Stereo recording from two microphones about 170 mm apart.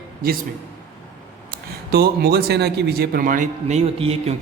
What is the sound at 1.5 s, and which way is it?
A man's voice, 65° right (ahead or behind).